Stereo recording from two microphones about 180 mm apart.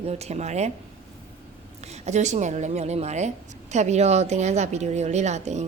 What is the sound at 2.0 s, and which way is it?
A woman's voice, 40° right (ahead or behind).